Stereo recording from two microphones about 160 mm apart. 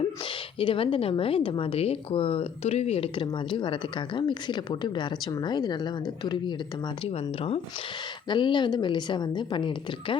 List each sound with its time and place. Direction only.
0.6 s speech: 35° left (ahead or behind)